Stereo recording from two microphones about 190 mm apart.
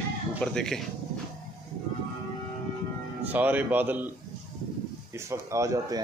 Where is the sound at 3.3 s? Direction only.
10° right (ahead or behind).